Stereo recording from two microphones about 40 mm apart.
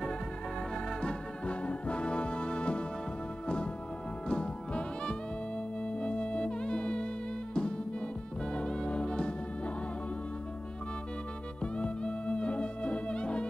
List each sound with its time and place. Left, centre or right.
1.0 s music: left
11.6 s music: left